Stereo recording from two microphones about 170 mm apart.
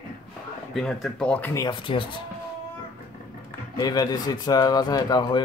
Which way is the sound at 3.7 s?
25° left (ahead or behind).